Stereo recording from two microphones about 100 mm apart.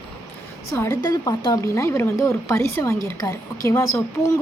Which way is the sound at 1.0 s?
40° left (ahead or behind).